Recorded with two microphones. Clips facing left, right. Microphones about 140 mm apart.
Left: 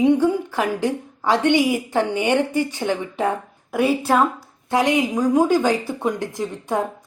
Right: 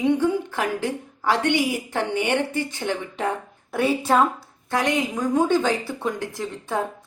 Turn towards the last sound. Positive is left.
turn(degrees=15)  # may be behind; listen again after turning